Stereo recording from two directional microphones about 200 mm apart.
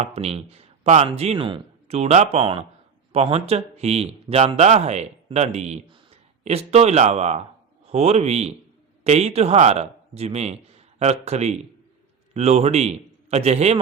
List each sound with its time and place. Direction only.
0.0 s speech: 30° right (ahead or behind)